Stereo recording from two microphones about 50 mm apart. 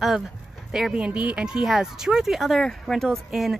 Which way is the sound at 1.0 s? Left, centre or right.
Right.